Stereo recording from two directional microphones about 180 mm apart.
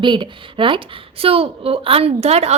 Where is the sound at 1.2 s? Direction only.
30° right (ahead or behind).